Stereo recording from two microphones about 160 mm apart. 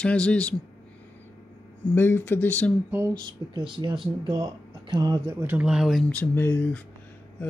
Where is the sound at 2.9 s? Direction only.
20° right (ahead or behind).